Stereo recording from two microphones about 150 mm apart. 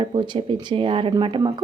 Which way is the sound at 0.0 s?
35° right (ahead or behind).